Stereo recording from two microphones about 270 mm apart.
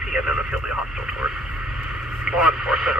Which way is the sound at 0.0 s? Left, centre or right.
Centre.